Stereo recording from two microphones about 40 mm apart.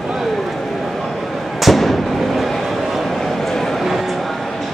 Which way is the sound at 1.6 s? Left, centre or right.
Centre.